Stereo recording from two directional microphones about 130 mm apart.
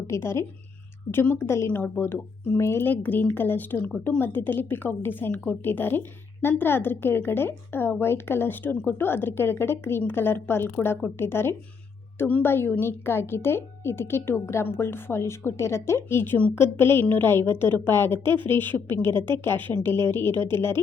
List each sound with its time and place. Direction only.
0.1 s a woman's voice: 20° left (ahead or behind)